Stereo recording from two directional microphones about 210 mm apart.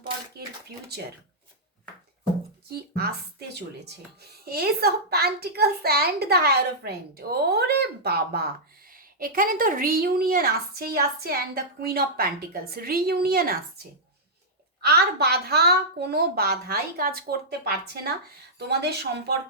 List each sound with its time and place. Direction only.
2.6 s speech: 50° right (ahead or behind)
14.8 s speech: 50° right (ahead or behind)